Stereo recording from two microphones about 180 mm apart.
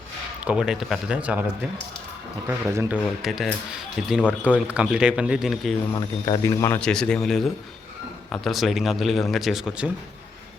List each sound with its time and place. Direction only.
0.4 s speech: 5° right (ahead or behind)
2.5 s speech: 10° right (ahead or behind)
6.2 s a man's voice: 20° left (ahead or behind)
6.7 s speech: 5° left (ahead or behind)